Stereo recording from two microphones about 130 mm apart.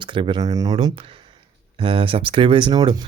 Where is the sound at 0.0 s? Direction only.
40° right (ahead or behind).